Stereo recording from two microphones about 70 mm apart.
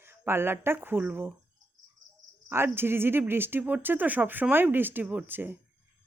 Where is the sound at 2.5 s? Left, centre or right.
Right.